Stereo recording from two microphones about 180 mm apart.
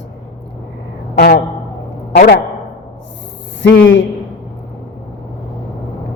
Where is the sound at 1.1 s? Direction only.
60° left (ahead or behind).